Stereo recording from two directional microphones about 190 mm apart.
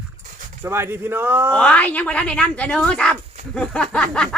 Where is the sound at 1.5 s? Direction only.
5° left (ahead or behind).